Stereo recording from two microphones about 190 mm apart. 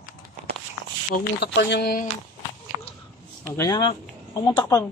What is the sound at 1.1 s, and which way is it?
Speech, 60° left (ahead or behind).